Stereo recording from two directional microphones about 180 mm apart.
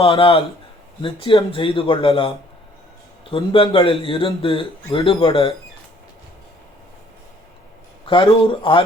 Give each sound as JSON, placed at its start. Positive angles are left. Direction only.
{"t": 0.0, "sound": "speech", "side_deg": 30}
{"t": 8.0, "sound": "speech", "side_deg": 30}